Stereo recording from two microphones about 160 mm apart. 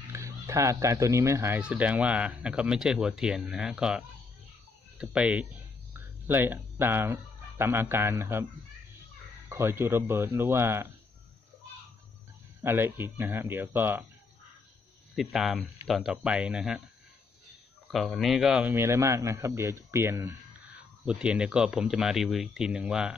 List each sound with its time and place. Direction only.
0.1 s speech: 20° right (ahead or behind)
9.5 s speech: 15° right (ahead or behind)
12.6 s speech: 15° right (ahead or behind)
15.1 s speech: centre (ahead or behind)
17.9 s speech: centre (ahead or behind)
18.7 s speech: 15° right (ahead or behind)